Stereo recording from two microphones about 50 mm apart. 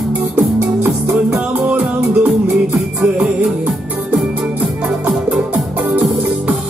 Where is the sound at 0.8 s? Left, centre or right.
Centre.